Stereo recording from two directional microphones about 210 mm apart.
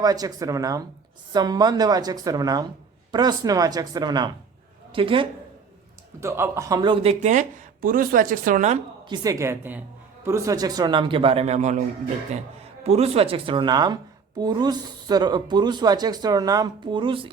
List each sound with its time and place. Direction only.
0.0 s a woman's voice: 15° right (ahead or behind)
6.1 s speech: 10° right (ahead or behind); by 8.8 s 35° right (ahead or behind)
9.0 s a woman's voice: 20° right (ahead or behind)
12.8 s a woman's voice: 30° right (ahead or behind)